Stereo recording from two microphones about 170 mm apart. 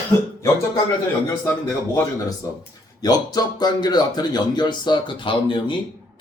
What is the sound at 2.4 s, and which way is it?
Speech, 20° left (ahead or behind).